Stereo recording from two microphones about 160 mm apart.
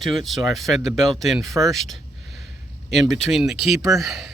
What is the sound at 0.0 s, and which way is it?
Speech, centre (ahead or behind).